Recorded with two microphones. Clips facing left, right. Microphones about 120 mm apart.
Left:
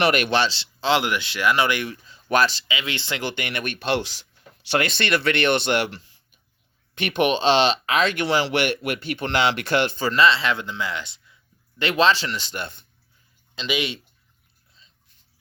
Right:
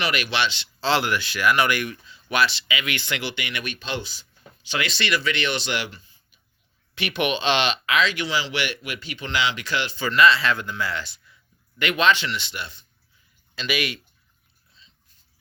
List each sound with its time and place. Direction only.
0.0 s speech: 50° left (ahead or behind); by 0.7 s 35° left (ahead or behind)
0.8 s speech: 20° left (ahead or behind)
2.2 s speech: 40° left (ahead or behind)
2.6 s speech: 25° left (ahead or behind)
3.2 s speech: 45° left (ahead or behind); by 4.3 s 75° left (ahead or behind)
4.7 s speech: 55° left (ahead or behind); by 6.2 s 75° left (ahead or behind)
6.9 s speech: 50° left (ahead or behind)
10.0 s speech: 35° left (ahead or behind)
10.2 s speech: 25° left (ahead or behind)
11.8 s speech: 30° left (ahead or behind); by 12.8 s 50° left (ahead or behind)
13.6 s speech: 20° left (ahead or behind)